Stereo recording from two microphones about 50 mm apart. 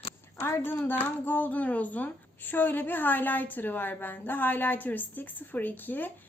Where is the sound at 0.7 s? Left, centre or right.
Left.